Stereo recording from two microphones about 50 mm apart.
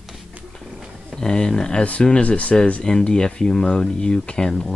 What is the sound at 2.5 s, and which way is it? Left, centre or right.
Speech, centre.